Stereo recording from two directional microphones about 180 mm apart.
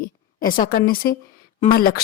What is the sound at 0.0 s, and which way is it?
A woman's voice, 50° left (ahead or behind).